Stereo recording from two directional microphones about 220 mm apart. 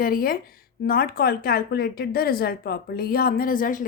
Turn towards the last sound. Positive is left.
turn(degrees=40)  # may be behind; listen again after turning